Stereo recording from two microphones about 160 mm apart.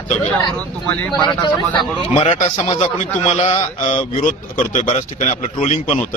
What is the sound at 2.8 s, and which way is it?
Speech, 45° left (ahead or behind).